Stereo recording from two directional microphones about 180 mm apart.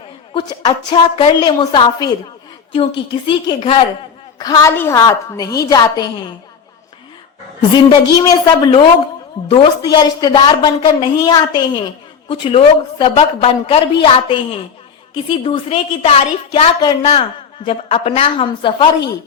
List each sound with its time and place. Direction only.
0.3 s a woman's voice: 25° left (ahead or behind)
3.2 s a woman's voice: 30° left (ahead or behind)
7.9 s a woman's voice: 25° left (ahead or behind)